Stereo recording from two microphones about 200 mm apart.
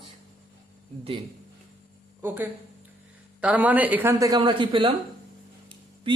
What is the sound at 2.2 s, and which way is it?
Speech, 10° right (ahead or behind).